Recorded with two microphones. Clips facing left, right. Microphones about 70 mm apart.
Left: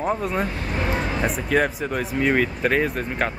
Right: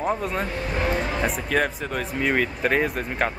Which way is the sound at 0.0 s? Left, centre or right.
Centre.